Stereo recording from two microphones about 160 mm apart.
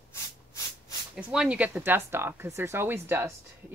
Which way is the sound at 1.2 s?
5° right (ahead or behind).